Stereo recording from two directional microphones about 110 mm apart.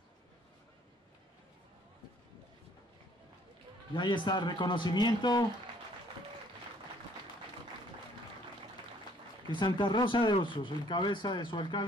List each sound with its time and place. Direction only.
3.9 s speech: 45° left (ahead or behind)
9.5 s speech: 45° left (ahead or behind)